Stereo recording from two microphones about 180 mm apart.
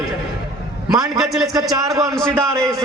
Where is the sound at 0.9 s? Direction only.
20° right (ahead or behind).